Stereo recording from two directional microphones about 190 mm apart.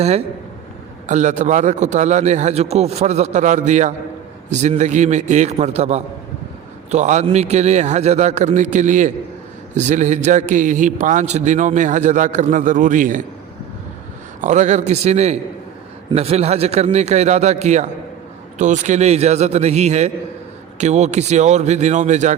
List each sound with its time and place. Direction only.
1.0 s a man's voice: 40° right (ahead or behind)
14.4 s a man's voice: 40° right (ahead or behind)